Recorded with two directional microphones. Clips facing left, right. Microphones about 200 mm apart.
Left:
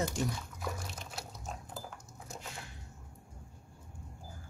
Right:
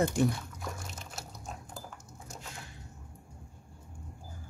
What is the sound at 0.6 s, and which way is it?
Dog, centre (ahead or behind).